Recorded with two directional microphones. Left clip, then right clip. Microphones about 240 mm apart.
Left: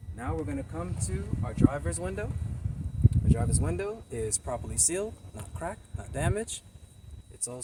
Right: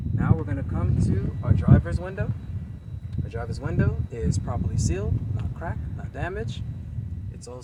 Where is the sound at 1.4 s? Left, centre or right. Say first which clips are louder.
Right 2 dB; centre.